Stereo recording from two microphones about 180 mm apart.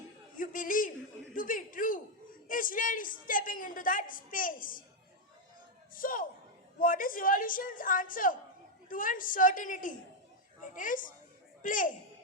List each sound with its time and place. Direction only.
0.3 s a man's voice: 50° left (ahead or behind)
5.9 s a woman's voice: 50° left (ahead or behind)